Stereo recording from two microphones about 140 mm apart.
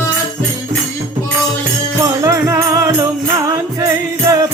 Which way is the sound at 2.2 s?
20° right (ahead or behind).